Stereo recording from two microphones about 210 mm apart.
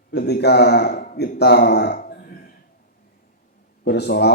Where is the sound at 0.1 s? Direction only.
50° left (ahead or behind).